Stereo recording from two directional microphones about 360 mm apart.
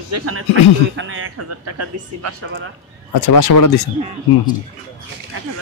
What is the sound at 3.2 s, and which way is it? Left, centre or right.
Speech, left.